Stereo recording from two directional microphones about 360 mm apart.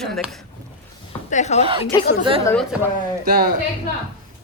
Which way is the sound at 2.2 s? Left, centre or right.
Centre.